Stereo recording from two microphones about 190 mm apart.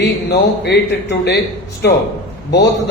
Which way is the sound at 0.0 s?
60° left (ahead or behind).